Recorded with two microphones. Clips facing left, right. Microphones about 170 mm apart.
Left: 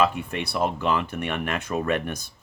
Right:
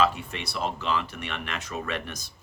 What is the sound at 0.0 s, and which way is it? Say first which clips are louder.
Speech: left 2 dB; 55° left (ahead or behind).